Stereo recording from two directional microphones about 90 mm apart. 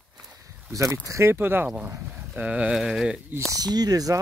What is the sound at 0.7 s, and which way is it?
Speech, 35° right (ahead or behind).